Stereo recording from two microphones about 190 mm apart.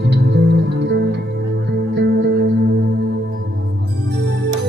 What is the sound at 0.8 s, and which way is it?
Music, 60° right (ahead or behind).